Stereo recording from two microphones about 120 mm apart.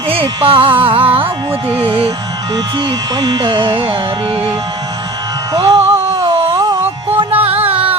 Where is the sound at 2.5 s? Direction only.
40° right (ahead or behind).